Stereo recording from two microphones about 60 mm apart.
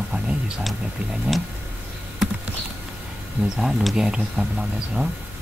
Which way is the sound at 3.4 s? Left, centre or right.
Right.